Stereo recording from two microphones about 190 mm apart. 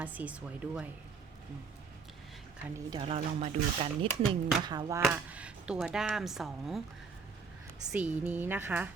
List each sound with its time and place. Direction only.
0.0 s a woman's voice: 10° right (ahead or behind)
2.7 s speech: 25° right (ahead or behind)
5.0 s speech: 5° right (ahead or behind)
7.9 s a woman's voice: 10° right (ahead or behind)